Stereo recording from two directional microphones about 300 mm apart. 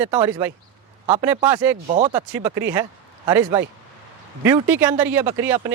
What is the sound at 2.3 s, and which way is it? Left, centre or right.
Speech, centre.